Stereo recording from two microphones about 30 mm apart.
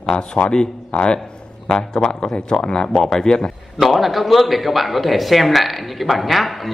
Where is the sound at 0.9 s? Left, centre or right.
Left.